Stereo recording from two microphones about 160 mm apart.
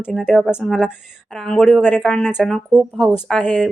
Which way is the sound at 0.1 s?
Centre (ahead or behind).